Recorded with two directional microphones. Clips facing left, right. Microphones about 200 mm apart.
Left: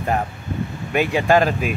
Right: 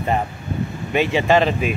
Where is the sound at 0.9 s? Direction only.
5° left (ahead or behind).